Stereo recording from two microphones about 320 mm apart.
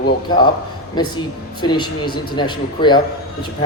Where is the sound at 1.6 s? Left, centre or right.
Centre.